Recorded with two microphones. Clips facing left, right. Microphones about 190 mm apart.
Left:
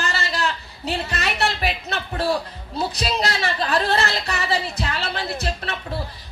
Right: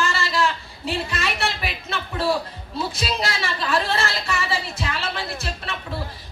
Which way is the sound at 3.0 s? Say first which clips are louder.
Left 3 dB; 40° left (ahead or behind).